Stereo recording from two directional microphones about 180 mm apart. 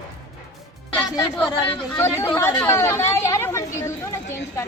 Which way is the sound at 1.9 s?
15° left (ahead or behind).